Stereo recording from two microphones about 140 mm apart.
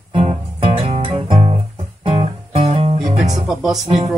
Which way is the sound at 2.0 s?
40° right (ahead or behind).